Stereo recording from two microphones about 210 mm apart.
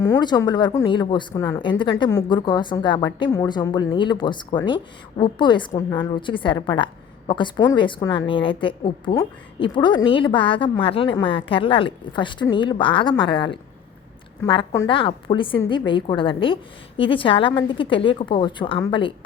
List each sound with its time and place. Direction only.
0.0 s a woman's voice: 20° left (ahead or behind)